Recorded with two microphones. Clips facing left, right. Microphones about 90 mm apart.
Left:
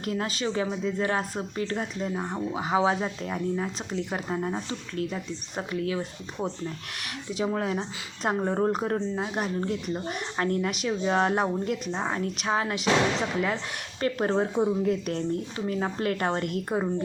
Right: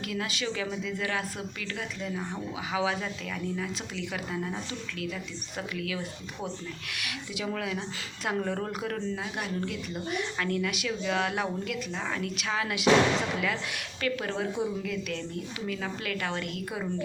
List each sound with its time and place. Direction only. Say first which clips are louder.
0.0 s speech: left 4 dB; 40° left (ahead or behind)
14.0 s speech: left 6 dB; 35° left (ahead or behind)